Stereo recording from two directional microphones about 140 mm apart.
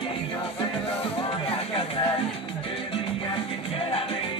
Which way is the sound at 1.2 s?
40° left (ahead or behind).